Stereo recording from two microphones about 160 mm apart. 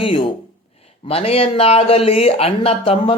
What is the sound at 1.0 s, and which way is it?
Speech, 40° left (ahead or behind).